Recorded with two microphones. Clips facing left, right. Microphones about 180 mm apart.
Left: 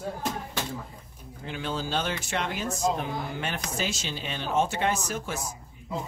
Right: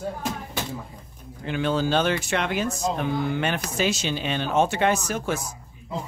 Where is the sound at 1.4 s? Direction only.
70° right (ahead or behind).